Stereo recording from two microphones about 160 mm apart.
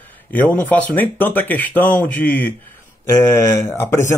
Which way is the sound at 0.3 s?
10° left (ahead or behind).